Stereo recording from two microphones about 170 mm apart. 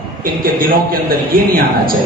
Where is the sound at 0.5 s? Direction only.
55° right (ahead or behind).